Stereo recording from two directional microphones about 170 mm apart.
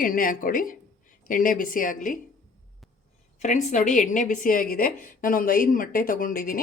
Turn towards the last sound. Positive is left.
turn(degrees=55)  # may be behind; listen again after turning